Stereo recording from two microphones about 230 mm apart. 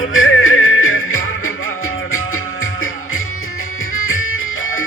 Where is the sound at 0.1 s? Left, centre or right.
Left.